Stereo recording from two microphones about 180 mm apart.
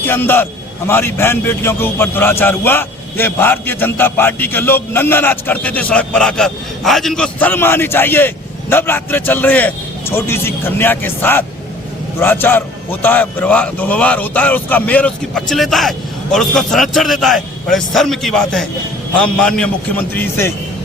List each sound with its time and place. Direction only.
0.0 s a man's voice: 10° left (ahead or behind)